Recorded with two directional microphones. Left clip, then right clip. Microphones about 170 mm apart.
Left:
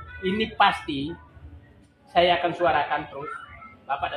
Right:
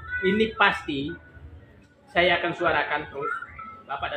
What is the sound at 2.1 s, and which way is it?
Speech, 30° left (ahead or behind).